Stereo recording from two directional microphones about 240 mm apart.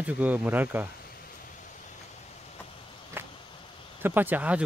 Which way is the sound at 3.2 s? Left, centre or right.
Centre.